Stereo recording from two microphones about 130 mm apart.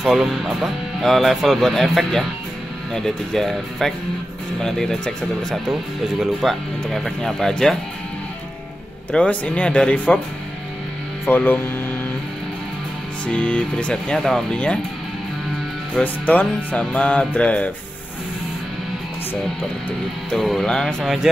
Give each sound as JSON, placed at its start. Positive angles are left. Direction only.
{"t": 0.0, "sound": "speech", "side_deg": 0}
{"t": 9.1, "sound": "music", "side_deg": 10}
{"t": 11.2, "sound": "music", "side_deg": 15}
{"t": 13.3, "sound": "music", "side_deg": 10}
{"t": 15.9, "sound": "music", "side_deg": 10}
{"t": 20.2, "sound": "speech", "side_deg": 0}